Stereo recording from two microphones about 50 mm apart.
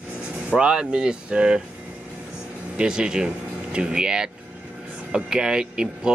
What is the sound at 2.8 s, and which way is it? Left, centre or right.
Speech, centre.